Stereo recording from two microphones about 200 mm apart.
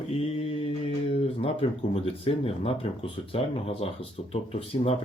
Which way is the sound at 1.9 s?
30° left (ahead or behind).